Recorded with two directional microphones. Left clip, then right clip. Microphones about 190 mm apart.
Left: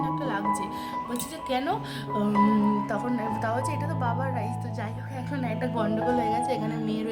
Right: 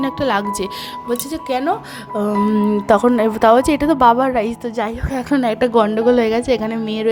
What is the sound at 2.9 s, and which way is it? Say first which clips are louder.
A woman's voice: right 16 dB; 50° right (ahead or behind).